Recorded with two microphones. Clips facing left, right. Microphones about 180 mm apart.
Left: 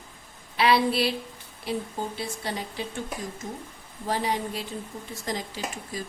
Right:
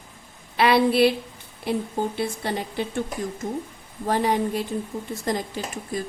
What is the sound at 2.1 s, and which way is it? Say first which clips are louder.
Speech: right 6 dB; 55° right (ahead or behind).